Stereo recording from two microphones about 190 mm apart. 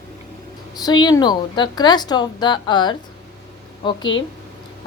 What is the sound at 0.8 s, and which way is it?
A woman's voice, 20° left (ahead or behind).